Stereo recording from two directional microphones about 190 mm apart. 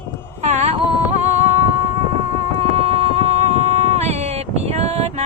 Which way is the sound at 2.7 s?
35° right (ahead or behind).